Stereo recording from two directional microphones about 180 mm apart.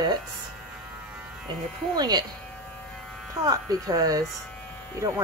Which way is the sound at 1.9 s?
20° right (ahead or behind).